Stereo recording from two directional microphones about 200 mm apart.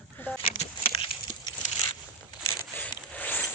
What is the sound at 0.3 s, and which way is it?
Speech, 10° left (ahead or behind).